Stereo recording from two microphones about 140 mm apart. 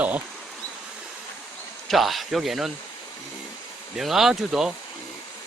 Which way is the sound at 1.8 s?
Centre (ahead or behind).